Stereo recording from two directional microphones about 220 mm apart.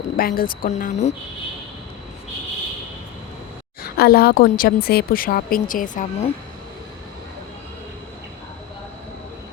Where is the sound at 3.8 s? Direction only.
45° left (ahead or behind).